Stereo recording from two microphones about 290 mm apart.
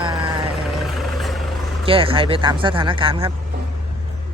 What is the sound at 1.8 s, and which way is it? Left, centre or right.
Speech, centre.